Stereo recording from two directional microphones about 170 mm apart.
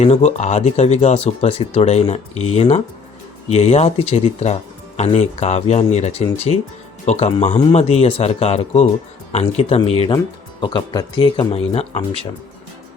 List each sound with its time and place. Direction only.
0.0 s speech: 40° left (ahead or behind)
11.3 s speech: 35° left (ahead or behind)